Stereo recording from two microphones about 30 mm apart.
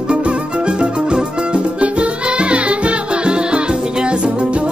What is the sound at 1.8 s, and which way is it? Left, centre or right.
Music, right.